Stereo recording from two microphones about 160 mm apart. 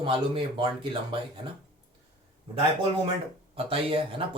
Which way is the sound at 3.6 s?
35° right (ahead or behind).